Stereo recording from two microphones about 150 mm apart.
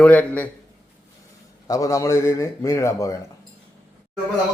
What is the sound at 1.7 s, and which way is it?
Speech, 20° left (ahead or behind).